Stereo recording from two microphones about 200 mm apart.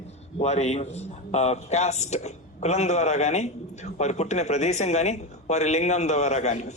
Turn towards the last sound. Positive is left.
turn(degrees=35)  # may be behind; listen again after turning